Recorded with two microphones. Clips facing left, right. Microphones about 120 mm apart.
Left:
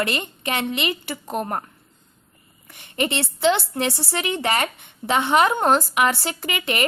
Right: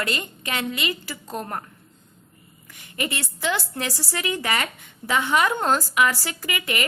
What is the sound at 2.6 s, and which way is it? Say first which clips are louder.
A woman's voice: left 5 dB; 25° left (ahead or behind).